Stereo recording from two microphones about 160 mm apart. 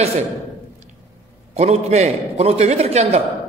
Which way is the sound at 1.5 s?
40° right (ahead or behind).